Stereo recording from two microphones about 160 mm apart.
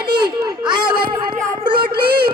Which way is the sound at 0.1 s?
30° right (ahead or behind).